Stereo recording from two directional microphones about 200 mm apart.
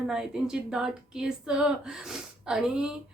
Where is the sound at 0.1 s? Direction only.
5° right (ahead or behind).